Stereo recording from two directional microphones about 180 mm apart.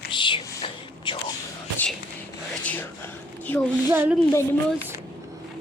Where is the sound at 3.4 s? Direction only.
10° left (ahead or behind).